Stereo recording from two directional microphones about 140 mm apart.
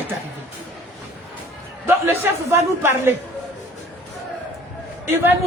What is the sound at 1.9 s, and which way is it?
A man's voice, 15° right (ahead or behind).